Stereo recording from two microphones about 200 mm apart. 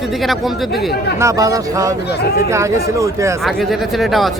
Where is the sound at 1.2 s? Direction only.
15° right (ahead or behind).